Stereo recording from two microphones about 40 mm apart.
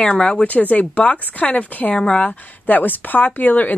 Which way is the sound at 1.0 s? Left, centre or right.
Left.